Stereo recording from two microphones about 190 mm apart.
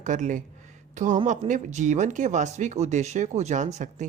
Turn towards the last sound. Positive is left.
turn(degrees=-40)  # may be behind; listen again after turning